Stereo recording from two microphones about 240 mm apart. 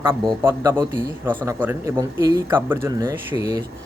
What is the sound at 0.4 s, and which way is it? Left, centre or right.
Speech, centre.